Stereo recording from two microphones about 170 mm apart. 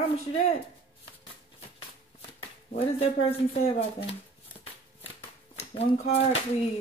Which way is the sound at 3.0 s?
35° left (ahead or behind).